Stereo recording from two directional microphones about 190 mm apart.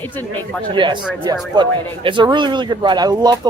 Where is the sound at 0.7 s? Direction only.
25° right (ahead or behind).